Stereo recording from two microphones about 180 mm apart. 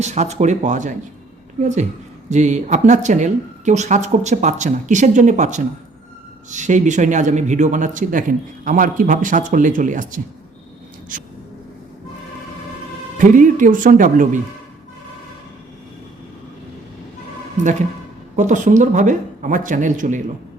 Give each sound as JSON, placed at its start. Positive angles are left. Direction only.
{"t": 0.0, "sound": "speech", "side_deg": -40}
{"t": 13.1, "sound": "speech", "side_deg": -45}
{"t": 17.6, "sound": "speech", "side_deg": -40}